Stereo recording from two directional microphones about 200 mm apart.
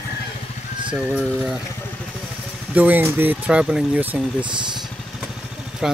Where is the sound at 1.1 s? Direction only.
Centre (ahead or behind).